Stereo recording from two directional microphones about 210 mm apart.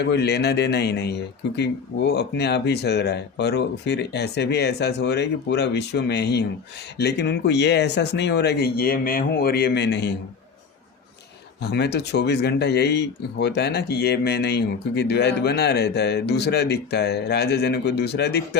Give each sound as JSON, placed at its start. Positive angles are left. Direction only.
{"t": 0.0, "sound": "speech", "side_deg": 55}
{"t": 11.6, "sound": "speech", "side_deg": 50}